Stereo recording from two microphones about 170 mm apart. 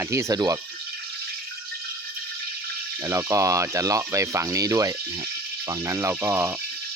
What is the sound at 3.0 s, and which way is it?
Speech, 20° right (ahead or behind).